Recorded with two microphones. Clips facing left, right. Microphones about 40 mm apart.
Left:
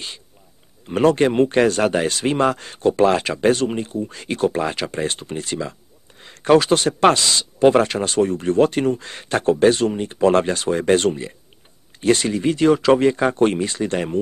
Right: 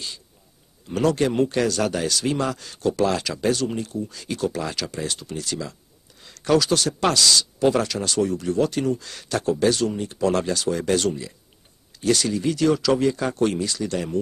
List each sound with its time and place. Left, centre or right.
0.8 s speech: left